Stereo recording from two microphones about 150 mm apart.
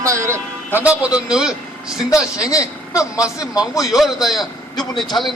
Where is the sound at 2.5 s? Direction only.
20° left (ahead or behind).